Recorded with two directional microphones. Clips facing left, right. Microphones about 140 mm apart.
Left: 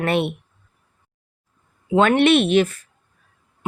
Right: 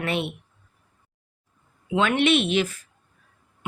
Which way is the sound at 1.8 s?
45° left (ahead or behind).